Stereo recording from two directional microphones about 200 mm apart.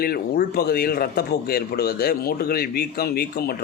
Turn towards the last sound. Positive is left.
turn(degrees=50)  # may be behind; listen again after turning